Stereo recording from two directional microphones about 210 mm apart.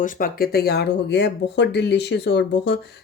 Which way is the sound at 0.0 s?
40° left (ahead or behind).